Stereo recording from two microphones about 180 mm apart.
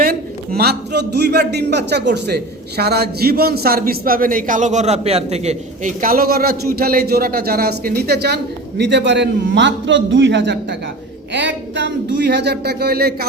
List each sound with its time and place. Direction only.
0.0 s a man's voice: 55° right (ahead or behind)
8.8 s a man's voice: 75° right (ahead or behind); by 13.2 s 60° right (ahead or behind)